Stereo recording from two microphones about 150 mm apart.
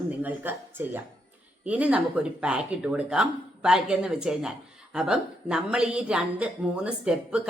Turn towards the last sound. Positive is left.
turn(degrees=-5)  # may be behind; listen again after turning